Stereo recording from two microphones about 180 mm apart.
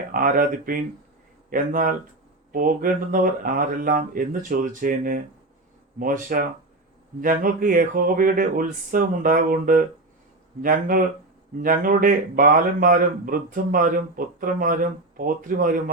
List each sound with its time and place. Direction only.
0.1 s speech: 50° right (ahead or behind)